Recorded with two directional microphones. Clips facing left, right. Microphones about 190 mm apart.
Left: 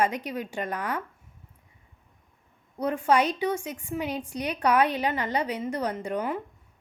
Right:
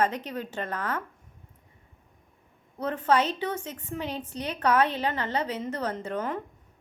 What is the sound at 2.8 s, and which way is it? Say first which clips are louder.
A woman's voice: left 1 dB; 10° left (ahead or behind).